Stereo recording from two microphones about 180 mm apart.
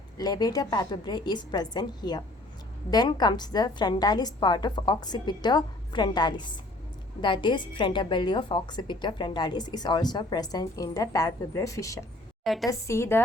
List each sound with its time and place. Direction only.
0.2 s a woman's voice: 20° left (ahead or behind)
12.5 s a woman's voice: centre (ahead or behind)
12.9 s a woman's voice: 15° left (ahead or behind)